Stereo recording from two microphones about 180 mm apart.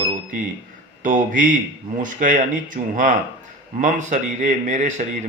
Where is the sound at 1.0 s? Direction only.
45° right (ahead or behind).